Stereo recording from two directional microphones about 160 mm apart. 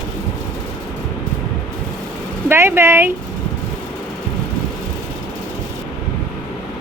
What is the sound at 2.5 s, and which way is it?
Speech, 15° right (ahead or behind).